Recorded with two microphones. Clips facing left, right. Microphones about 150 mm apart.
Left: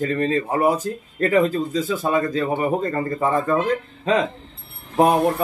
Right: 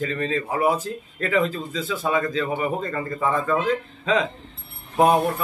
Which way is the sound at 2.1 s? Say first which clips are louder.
Even; 45° left (ahead or behind).